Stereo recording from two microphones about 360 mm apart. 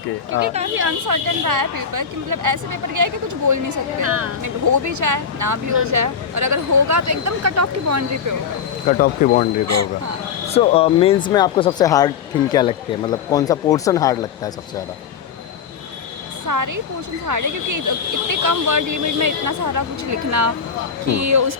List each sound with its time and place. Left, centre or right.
0.4 s a woman's voice: centre
0.8 s speech: right
4.0 s speech: right
4.4 s speech: right
8.9 s speech: left
10.5 s speech: centre
16.5 s speech: right
21.1 s speech: right